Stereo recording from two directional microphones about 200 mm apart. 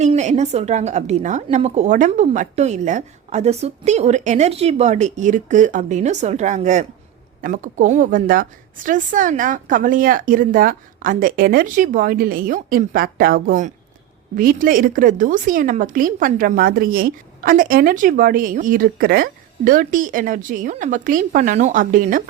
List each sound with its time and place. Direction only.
0.0 s a woman's voice: 35° right (ahead or behind)